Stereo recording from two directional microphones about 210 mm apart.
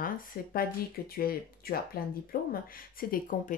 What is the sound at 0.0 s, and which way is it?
Speech, 45° left (ahead or behind).